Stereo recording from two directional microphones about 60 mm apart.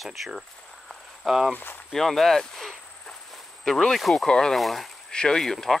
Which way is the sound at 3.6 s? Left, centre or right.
Centre.